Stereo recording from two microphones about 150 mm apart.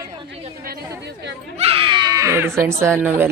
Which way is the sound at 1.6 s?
40° right (ahead or behind).